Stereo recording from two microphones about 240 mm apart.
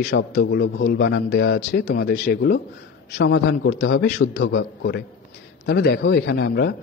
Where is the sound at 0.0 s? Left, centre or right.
Left.